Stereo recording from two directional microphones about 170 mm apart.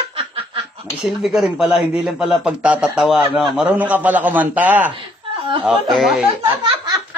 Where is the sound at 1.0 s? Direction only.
5° right (ahead or behind).